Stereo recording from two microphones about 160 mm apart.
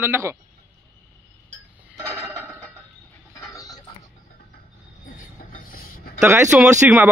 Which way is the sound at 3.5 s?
20° left (ahead or behind).